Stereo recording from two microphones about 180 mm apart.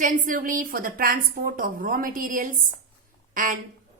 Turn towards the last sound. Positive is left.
turn(degrees=-50)  # may be behind; listen again after turning